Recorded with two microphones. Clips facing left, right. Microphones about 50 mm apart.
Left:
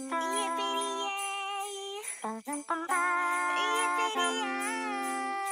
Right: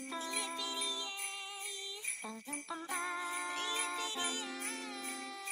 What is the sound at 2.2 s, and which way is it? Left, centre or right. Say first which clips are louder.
Music: left 14 dB; left.